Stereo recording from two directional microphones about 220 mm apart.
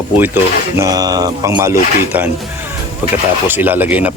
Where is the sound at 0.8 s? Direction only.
15° right (ahead or behind).